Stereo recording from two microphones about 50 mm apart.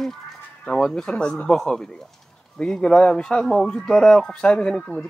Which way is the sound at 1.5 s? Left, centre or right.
Centre.